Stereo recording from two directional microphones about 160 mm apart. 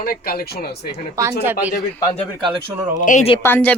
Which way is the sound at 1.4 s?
15° right (ahead or behind).